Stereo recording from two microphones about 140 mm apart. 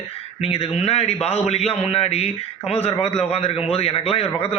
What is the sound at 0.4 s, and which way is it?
Speech, 45° left (ahead or behind).